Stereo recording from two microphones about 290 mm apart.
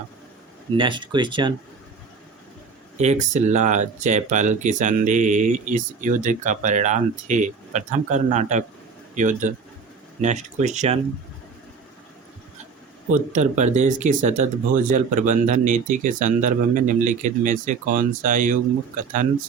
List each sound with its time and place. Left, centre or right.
0.8 s speech: centre
3.0 s speech: right
13.1 s speech: right